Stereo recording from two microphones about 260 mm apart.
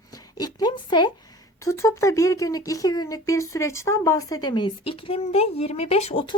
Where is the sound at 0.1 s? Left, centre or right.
Centre.